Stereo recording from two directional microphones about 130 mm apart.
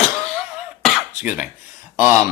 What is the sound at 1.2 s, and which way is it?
Speech, 15° right (ahead or behind).